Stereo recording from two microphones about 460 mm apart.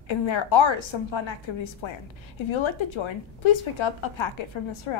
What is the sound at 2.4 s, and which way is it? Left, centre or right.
Speech, left.